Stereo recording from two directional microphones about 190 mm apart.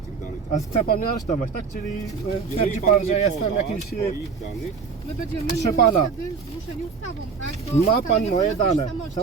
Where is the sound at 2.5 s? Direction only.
35° left (ahead or behind).